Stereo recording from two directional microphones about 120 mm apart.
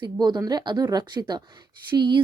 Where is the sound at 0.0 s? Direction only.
35° right (ahead or behind).